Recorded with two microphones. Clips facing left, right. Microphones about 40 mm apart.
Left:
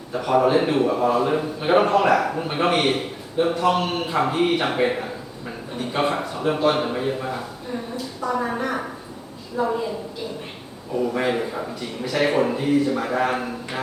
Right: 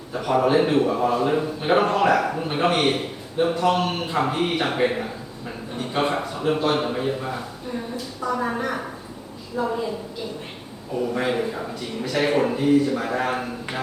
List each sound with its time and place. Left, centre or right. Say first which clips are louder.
0.1 s a man's voice: left 1 dB; centre